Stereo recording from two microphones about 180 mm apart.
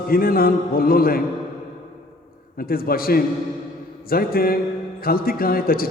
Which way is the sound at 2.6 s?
55° left (ahead or behind).